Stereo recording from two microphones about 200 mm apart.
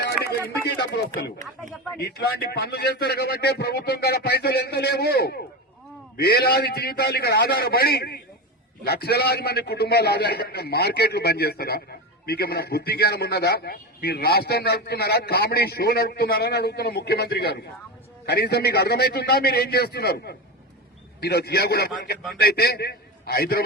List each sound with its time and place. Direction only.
0.8 s a man's voice: 60° left (ahead or behind)